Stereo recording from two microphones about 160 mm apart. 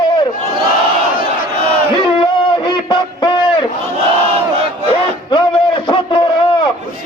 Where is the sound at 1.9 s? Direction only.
30° left (ahead or behind).